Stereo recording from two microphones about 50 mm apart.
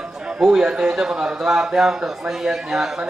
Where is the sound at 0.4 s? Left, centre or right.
Centre.